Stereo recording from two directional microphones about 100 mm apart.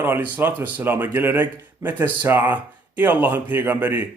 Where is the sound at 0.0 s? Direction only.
20° right (ahead or behind).